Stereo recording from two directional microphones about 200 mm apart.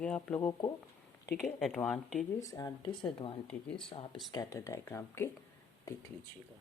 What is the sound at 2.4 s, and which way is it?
Speech, 15° left (ahead or behind).